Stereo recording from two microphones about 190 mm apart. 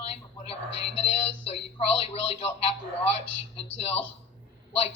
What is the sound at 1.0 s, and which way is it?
A man's voice, 30° left (ahead or behind).